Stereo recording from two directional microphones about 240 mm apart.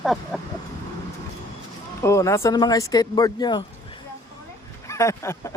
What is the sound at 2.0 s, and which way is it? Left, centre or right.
Speech, centre.